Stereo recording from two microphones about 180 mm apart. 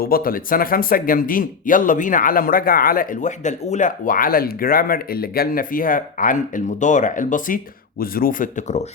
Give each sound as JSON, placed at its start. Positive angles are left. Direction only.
{"t": 0.0, "sound": "speech", "side_deg": 55}